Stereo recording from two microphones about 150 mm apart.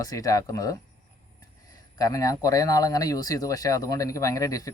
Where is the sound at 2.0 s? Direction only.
25° left (ahead or behind).